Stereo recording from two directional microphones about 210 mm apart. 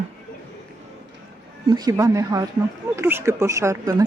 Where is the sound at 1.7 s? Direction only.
15° right (ahead or behind).